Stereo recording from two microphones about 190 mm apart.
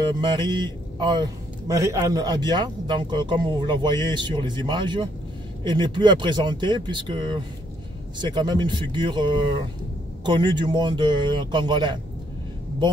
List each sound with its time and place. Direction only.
0.0 s a man's voice: 25° right (ahead or behind)